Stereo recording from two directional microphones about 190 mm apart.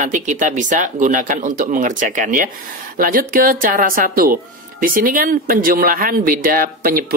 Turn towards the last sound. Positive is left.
turn(degrees=-50)  # may be behind; listen again after turning